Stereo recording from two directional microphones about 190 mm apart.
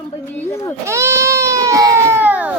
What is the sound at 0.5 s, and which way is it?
Baby cry, 15° left (ahead or behind).